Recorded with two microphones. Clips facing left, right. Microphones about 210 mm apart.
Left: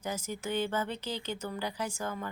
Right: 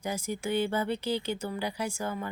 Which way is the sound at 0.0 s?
10° right (ahead or behind).